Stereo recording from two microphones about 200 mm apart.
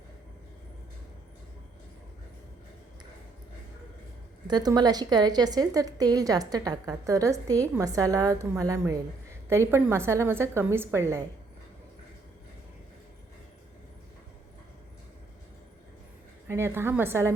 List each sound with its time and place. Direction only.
4.4 s a woman's voice: 20° right (ahead or behind)
16.5 s a woman's voice: 10° right (ahead or behind)